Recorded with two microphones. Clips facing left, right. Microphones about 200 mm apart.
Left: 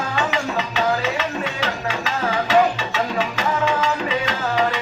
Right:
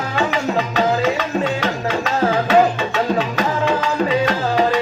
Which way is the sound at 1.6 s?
55° right (ahead or behind).